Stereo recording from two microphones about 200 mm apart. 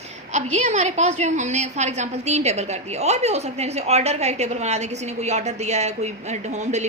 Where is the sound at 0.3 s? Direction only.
35° right (ahead or behind).